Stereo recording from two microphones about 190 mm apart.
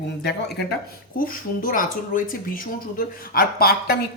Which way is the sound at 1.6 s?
45° left (ahead or behind).